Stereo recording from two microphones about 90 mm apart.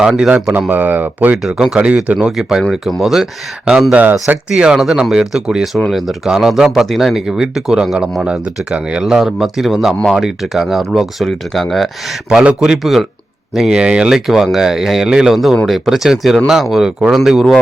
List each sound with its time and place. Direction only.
0.0 s speech: 10° right (ahead or behind)
0.7 s speech: 20° right (ahead or behind)
1.4 s speech: 5° right (ahead or behind)